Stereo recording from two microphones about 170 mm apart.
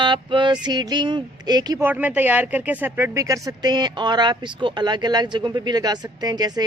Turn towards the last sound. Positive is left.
turn(degrees=-25)  # may be behind; listen again after turning